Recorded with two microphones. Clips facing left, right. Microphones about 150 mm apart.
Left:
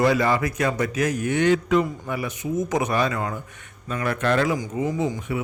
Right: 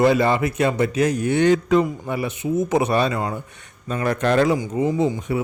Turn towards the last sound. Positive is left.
turn(degrees=-35)  # may be behind; listen again after turning